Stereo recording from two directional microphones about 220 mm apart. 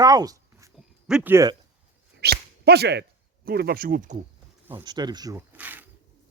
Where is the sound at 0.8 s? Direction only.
5° right (ahead or behind).